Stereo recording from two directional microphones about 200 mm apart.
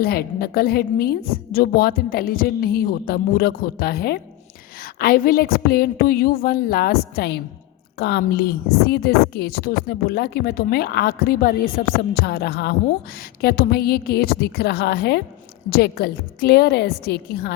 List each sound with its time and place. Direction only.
0.0 s a woman's voice: 50° left (ahead or behind)